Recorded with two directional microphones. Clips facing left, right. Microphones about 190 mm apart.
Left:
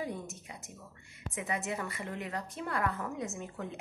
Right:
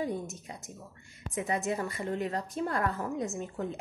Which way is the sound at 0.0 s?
35° right (ahead or behind).